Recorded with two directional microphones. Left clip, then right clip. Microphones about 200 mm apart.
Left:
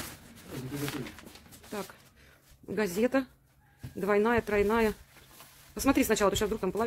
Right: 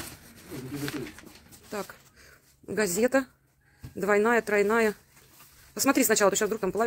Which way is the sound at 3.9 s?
10° right (ahead or behind).